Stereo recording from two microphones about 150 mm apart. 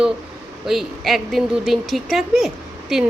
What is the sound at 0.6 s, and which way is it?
Speech, centre (ahead or behind).